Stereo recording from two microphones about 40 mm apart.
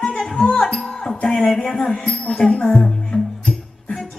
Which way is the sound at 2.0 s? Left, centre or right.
Left.